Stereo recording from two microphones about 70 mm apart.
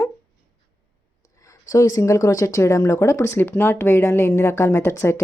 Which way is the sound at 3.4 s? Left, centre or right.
Left.